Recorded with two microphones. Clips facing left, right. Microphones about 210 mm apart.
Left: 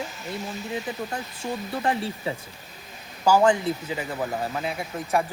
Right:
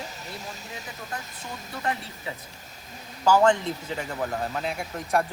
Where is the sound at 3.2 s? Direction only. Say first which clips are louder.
Left 1 dB; 10° left (ahead or behind).